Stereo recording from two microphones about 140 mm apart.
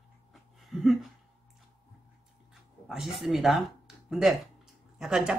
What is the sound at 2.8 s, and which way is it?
Speech, 5° right (ahead or behind).